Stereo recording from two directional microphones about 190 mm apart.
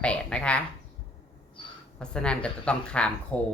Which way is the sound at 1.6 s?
25° left (ahead or behind).